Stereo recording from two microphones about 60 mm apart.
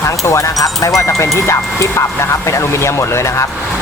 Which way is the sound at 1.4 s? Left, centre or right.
Left.